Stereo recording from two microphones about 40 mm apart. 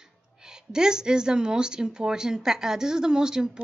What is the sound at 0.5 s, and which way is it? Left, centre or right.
A woman's voice, centre.